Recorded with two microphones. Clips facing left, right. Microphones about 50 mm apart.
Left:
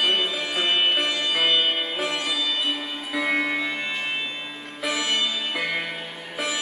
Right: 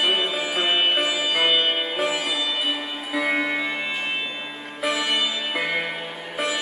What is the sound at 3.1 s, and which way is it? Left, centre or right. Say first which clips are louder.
Music: right 1 dB; centre.